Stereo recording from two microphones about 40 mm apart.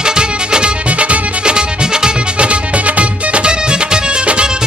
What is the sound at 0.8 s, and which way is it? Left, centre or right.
Music, right.